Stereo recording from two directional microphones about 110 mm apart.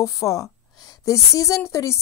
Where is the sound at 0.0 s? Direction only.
30° left (ahead or behind).